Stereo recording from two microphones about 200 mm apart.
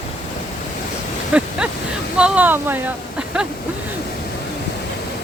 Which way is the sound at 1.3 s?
5° right (ahead or behind).